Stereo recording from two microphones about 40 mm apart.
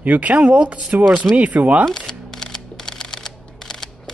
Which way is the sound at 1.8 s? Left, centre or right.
Centre.